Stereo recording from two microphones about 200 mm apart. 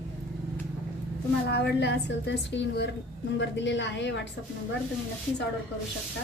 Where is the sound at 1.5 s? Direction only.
55° left (ahead or behind).